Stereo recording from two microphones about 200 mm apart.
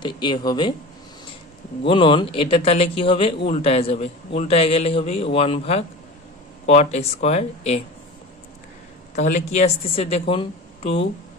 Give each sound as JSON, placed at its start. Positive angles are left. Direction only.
{"t": 0.0, "sound": "a man's voice", "side_deg": 25}
{"t": 1.9, "sound": "a man's voice", "side_deg": 25}
{"t": 9.1, "sound": "a man's voice", "side_deg": 35}